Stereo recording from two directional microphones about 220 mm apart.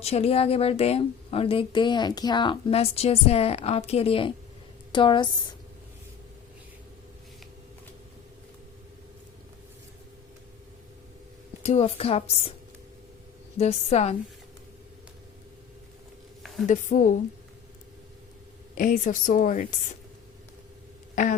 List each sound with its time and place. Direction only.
0.0 s a woman's voice: 25° left (ahead or behind)
11.6 s a woman's voice: 25° left (ahead or behind)
13.6 s a woman's voice: 30° left (ahead or behind)
16.6 s a woman's voice: 35° left (ahead or behind)
18.7 s a woman's voice: 40° left (ahead or behind)